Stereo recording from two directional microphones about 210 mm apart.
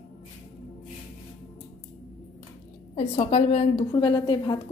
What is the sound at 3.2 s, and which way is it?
A woman's voice, 30° left (ahead or behind).